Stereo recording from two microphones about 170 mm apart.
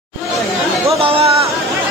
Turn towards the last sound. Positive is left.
turn(degrees=-35)  # may be behind; listen again after turning